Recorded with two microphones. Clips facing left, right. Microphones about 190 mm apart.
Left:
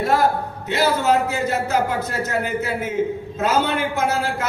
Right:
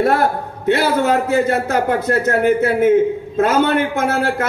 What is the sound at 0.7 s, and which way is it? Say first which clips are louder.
A man's voice: right 4 dB; 55° right (ahead or behind).